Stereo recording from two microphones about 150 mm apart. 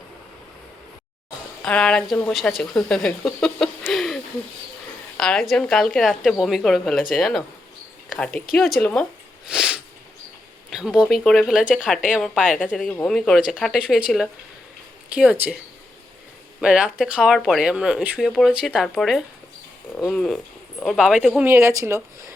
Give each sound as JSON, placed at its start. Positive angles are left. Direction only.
{"t": 1.6, "sound": "speech", "side_deg": 5}
{"t": 8.8, "sound": "speech", "side_deg": 10}
{"t": 9.5, "sound": "a sound", "side_deg": -5}
{"t": 10.7, "sound": "speech", "side_deg": -5}
{"t": 15.1, "sound": "speech", "side_deg": -5}
{"t": 16.6, "sound": "speech", "side_deg": -5}
{"t": 21.4, "sound": "speech", "side_deg": -20}